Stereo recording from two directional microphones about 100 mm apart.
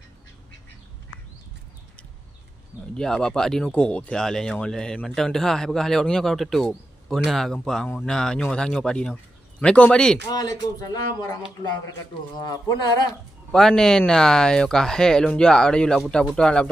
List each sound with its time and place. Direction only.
3.0 s speech: 5° left (ahead or behind)
10.3 s speech: 40° left (ahead or behind)
12.4 s speech: 40° left (ahead or behind)
13.5 s speech: 5° left (ahead or behind)